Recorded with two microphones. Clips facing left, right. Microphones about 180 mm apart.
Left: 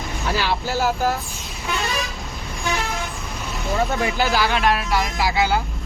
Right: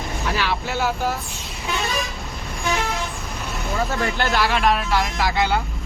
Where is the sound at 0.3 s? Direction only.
35° left (ahead or behind).